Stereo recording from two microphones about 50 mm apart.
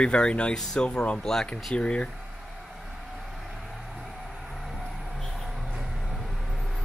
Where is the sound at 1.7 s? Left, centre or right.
Left.